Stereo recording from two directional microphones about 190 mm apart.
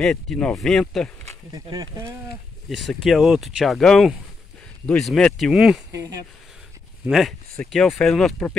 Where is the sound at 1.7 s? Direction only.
20° right (ahead or behind).